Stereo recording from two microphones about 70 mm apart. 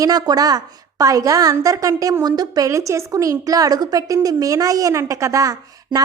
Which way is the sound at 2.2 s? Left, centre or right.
Right.